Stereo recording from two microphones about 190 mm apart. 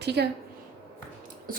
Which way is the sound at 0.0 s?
60° right (ahead or behind).